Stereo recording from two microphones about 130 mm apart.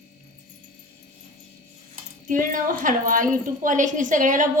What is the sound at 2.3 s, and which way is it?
A woman's voice, 90° right.